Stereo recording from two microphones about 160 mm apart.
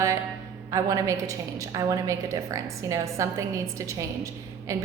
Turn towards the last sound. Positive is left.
turn(degrees=-20)  # may be behind; listen again after turning